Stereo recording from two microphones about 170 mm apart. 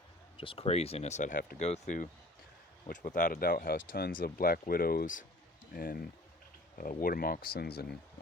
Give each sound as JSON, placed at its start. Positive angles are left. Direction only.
{"t": 0.3, "sound": "speech", "side_deg": 35}
{"t": 7.0, "sound": "speech", "side_deg": 60}